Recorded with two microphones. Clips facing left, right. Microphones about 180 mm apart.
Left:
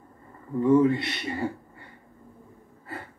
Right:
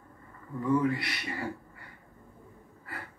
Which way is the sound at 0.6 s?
25° left (ahead or behind).